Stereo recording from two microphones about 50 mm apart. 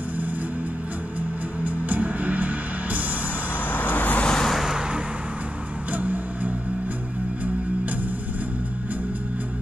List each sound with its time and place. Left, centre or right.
1.6 s music: right
3.7 s vehicle: left
4.4 s vehicle: centre
4.6 s vehicle: centre
5.9 s music: right